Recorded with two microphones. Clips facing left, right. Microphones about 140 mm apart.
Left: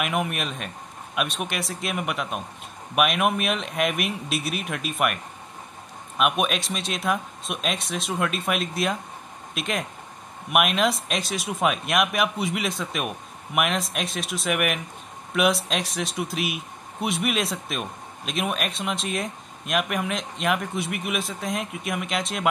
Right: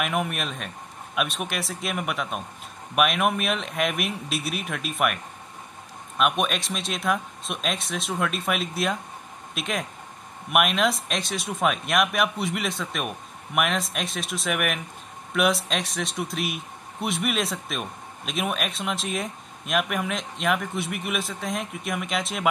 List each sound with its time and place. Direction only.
0.0 s speech: centre (ahead or behind)